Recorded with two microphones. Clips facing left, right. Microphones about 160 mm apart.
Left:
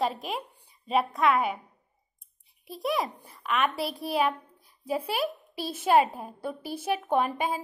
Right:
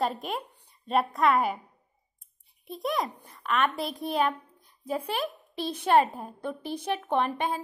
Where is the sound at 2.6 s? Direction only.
Centre (ahead or behind).